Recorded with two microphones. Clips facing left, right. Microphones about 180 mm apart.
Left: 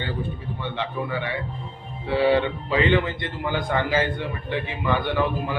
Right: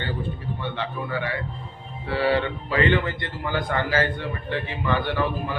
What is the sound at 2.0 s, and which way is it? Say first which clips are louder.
A man's voice: left 3 dB; 20° left (ahead or behind).